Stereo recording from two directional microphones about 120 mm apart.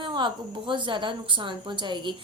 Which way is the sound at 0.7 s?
40° right (ahead or behind).